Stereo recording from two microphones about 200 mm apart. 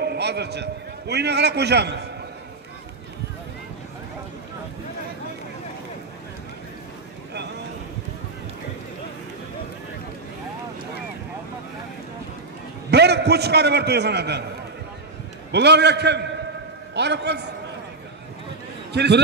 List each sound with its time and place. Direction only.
0.0 s a man's voice: 55° right (ahead or behind)
12.9 s a man's voice: 55° right (ahead or behind)
15.5 s a man's voice: 55° right (ahead or behind)
18.9 s a man's voice: 60° right (ahead or behind)